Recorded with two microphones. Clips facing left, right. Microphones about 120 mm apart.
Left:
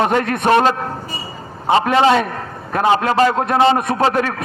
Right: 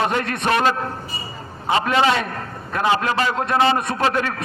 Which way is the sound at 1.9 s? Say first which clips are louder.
Left 4 dB; 30° left (ahead or behind).